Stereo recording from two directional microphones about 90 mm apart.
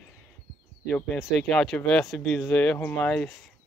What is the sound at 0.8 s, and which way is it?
Speech, 10° left (ahead or behind).